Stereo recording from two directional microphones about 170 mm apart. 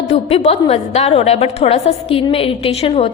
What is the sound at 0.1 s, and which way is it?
A woman's voice, 35° left (ahead or behind).